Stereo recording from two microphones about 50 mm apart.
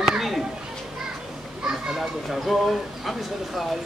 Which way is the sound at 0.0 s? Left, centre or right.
Centre.